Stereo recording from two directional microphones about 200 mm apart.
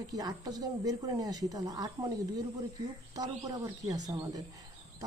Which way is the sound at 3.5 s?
20° right (ahead or behind).